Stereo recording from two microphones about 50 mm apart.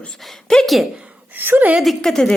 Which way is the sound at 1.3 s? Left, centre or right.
Right.